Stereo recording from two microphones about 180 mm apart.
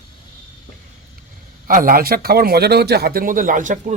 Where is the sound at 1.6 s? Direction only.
50° right (ahead or behind).